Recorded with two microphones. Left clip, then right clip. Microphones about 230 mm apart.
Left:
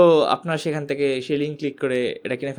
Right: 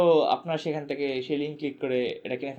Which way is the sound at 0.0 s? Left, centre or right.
Left.